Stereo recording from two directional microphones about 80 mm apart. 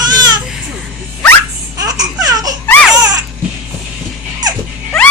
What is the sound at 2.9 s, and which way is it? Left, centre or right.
Music, right.